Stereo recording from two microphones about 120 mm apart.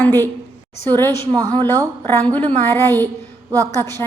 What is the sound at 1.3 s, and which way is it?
Speech, 40° right (ahead or behind).